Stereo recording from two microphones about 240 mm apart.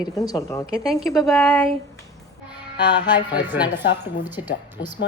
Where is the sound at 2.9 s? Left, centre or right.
Centre.